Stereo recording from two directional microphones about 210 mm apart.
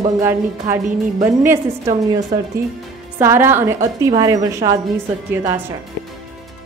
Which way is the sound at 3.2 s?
10° right (ahead or behind).